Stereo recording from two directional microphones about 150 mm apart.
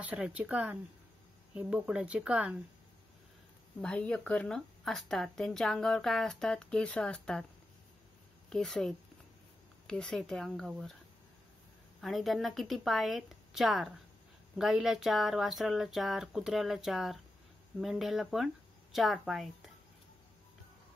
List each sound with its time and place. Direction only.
0.0 s speech: 5° right (ahead or behind)
3.8 s speech: 10° left (ahead or behind)
8.5 s speech: 5° left (ahead or behind)
12.0 s speech: centre (ahead or behind)